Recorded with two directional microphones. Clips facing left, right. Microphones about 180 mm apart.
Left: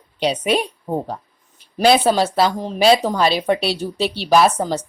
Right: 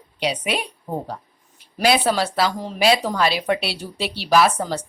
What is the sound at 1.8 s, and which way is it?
A woman's voice, 25° left (ahead or behind).